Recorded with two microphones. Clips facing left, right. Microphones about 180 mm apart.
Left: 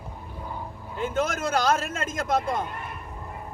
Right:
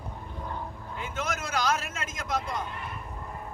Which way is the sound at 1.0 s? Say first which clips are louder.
Left 8 dB; 50° left (ahead or behind).